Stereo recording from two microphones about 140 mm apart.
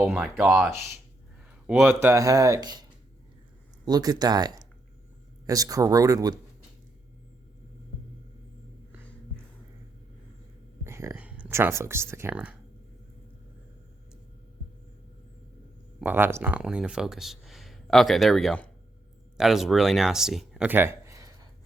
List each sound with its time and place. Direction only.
0.0 s speech: 10° right (ahead or behind)
1.9 s speech: 15° right (ahead or behind)
3.8 s speech: 30° right (ahead or behind)
10.8 s speech: 20° right (ahead or behind)
16.0 s speech: 15° right (ahead or behind)
20.7 s a sound: 15° right (ahead or behind)